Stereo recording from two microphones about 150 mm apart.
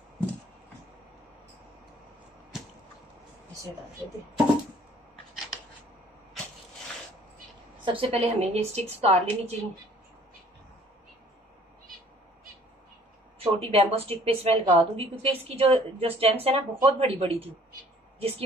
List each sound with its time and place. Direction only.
7.8 s a woman's voice: 35° right (ahead or behind)
13.4 s a woman's voice: 40° right (ahead or behind)